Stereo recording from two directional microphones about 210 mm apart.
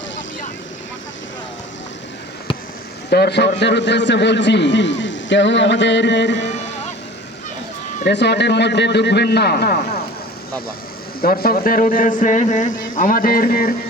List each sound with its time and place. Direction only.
3.1 s a man's voice: 50° left (ahead or behind)
8.0 s a man's voice: 55° left (ahead or behind)
11.2 s speech: 45° left (ahead or behind)